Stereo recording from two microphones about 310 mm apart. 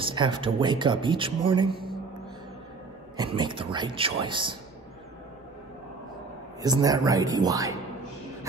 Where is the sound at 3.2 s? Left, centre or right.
Centre.